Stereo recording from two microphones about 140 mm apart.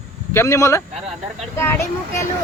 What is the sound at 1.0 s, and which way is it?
Speech, 50° right (ahead or behind).